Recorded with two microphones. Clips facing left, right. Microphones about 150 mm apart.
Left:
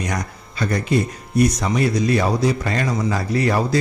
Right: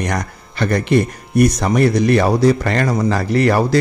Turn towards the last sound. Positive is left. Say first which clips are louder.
# right 5 dB
turn(degrees=-70)  # may be behind; listen again after turning